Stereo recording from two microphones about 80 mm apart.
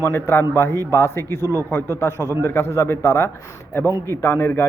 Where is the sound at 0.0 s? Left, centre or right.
Left.